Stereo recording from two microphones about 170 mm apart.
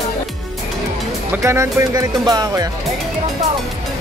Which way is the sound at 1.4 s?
15° right (ahead or behind).